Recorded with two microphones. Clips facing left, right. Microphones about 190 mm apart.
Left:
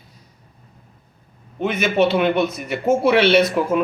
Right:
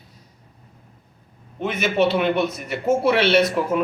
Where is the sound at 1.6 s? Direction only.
Centre (ahead or behind).